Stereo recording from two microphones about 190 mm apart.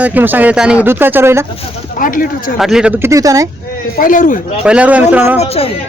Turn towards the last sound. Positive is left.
turn(degrees=30)  # may be behind; listen again after turning